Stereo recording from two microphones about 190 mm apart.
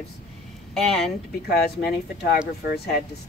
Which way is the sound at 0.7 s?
Centre (ahead or behind).